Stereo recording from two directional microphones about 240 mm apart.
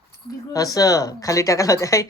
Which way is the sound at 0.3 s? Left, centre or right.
Centre.